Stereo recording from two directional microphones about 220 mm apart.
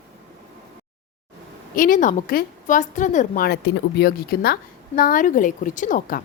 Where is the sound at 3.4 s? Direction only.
50° left (ahead or behind).